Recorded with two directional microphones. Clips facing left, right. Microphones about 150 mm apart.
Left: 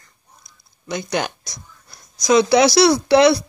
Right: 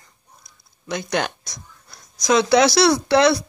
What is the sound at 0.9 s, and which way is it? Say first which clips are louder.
Speech: even; centre (ahead or behind).